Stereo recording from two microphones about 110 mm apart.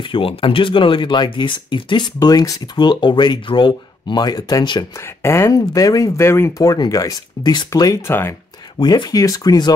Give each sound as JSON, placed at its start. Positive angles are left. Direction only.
{"t": 0.0, "sound": "speech", "side_deg": 55}
{"t": 4.9, "sound": "speech", "side_deg": 25}
{"t": 8.1, "sound": "speech", "side_deg": 20}
{"t": 8.7, "sound": "speech", "side_deg": 45}